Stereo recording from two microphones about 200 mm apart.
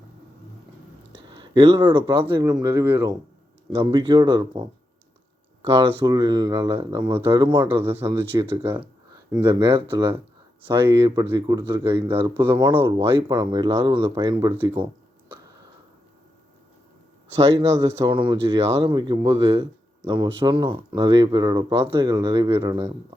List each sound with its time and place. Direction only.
1.3 s speech: 25° right (ahead or behind)
3.8 s speech: 25° right (ahead or behind)
5.8 s speech: 20° right (ahead or behind)
7.8 s speech: 10° right (ahead or behind)
17.7 s speech: 15° right (ahead or behind)